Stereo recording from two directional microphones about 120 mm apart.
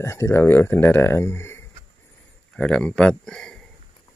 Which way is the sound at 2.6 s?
10° left (ahead or behind).